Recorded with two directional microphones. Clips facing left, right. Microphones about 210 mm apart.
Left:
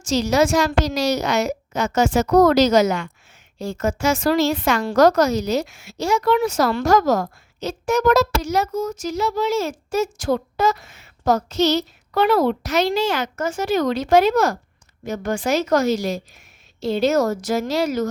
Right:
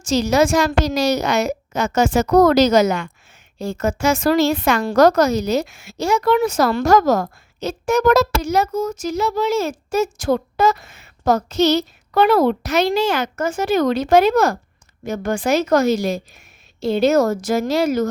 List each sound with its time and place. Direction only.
0.0 s a woman's voice: 50° right (ahead or behind)